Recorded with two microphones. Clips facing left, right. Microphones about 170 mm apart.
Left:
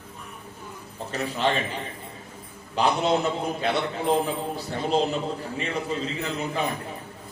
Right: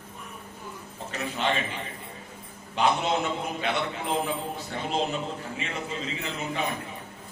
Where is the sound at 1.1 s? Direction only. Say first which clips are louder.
Left 4 dB; 35° left (ahead or behind).